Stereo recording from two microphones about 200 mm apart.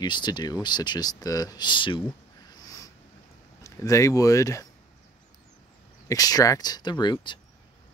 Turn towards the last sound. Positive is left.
turn(degrees=20)  # may be behind; listen again after turning